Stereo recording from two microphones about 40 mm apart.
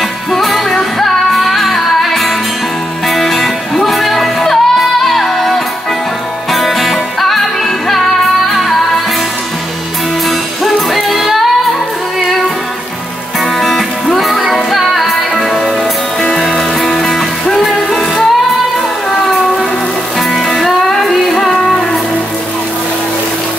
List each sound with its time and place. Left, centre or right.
0.3 s music: centre
8.5 s music: centre
10.6 s music: centre
13.6 s music: centre
15.3 s music: centre
20.4 s music: centre